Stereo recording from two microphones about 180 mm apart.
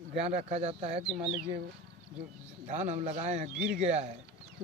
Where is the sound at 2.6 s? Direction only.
40° right (ahead or behind).